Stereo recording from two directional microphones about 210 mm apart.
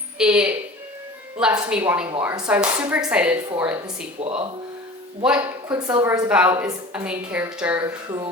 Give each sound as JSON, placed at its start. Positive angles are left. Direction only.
{"t": 0.2, "sound": "a woman's voice", "side_deg": -5}
{"t": 4.2, "sound": "speech", "side_deg": -30}
{"t": 5.2, "sound": "a woman's voice", "side_deg": -5}